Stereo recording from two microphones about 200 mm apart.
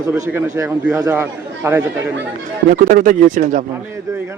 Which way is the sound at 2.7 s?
45° right (ahead or behind).